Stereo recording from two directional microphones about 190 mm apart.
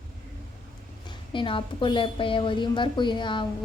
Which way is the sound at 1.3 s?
25° left (ahead or behind).